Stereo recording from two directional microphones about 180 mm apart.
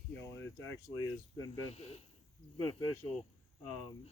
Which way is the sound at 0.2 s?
15° left (ahead or behind).